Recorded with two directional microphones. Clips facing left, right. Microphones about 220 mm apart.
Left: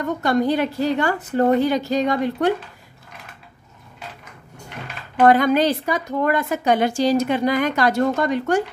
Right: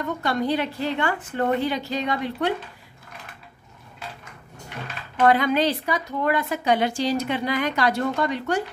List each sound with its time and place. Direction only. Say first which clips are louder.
0.0 s a woman's voice: left 5 dB; 45° left (ahead or behind)
5.2 s a woman's voice: left 4 dB; 45° left (ahead or behind)